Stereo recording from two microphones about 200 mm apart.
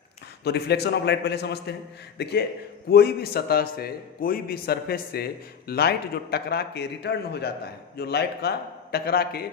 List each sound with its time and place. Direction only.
0.4 s a man's voice: 55° left (ahead or behind)